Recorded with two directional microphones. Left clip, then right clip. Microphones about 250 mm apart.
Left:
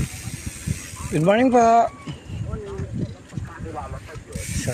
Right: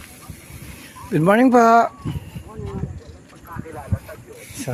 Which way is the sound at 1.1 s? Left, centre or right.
Right.